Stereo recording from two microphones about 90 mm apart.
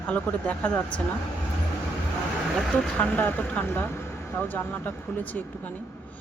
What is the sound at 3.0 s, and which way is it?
Speech, 20° left (ahead or behind).